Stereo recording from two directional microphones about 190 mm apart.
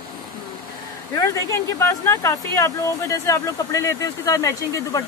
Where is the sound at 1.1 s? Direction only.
15° left (ahead or behind).